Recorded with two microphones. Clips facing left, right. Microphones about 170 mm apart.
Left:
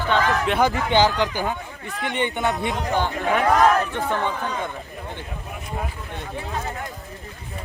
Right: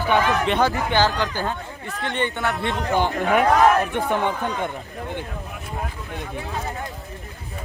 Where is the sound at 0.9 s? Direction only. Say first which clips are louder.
Left 2 dB; 15° left (ahead or behind).